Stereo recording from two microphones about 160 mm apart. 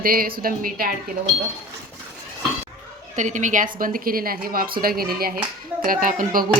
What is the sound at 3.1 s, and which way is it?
A woman's voice, 50° right (ahead or behind).